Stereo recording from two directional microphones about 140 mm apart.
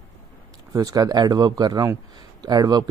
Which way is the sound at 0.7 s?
25° right (ahead or behind).